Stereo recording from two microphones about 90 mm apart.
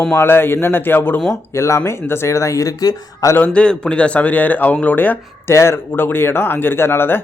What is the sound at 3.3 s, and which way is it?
A man's voice, 15° left (ahead or behind).